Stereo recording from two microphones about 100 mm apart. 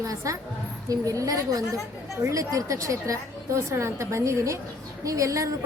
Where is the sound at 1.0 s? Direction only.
35° right (ahead or behind).